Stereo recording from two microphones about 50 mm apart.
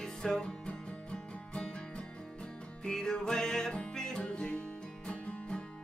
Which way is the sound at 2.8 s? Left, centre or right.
Centre.